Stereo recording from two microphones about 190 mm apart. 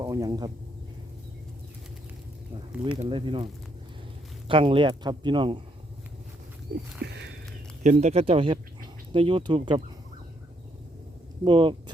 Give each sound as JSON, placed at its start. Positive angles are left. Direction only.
{"t": 0.0, "sound": "speech", "side_deg": -20}
{"t": 3.0, "sound": "speech", "side_deg": -25}
{"t": 7.0, "sound": "a sound", "side_deg": -65}
{"t": 7.9, "sound": "speech", "side_deg": -35}
{"t": 11.4, "sound": "speech", "side_deg": -25}